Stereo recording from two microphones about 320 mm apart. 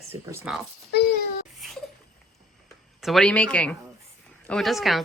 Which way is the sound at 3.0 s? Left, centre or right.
Centre.